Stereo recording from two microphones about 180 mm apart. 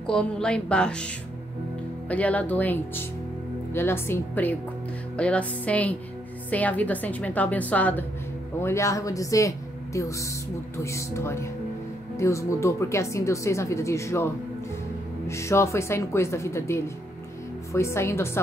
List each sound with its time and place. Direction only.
0.0 s a woman's voice: 5° left (ahead or behind)
2.0 s speech: 10° left (ahead or behind)